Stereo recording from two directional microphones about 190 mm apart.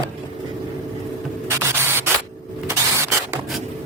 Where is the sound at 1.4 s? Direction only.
15° right (ahead or behind).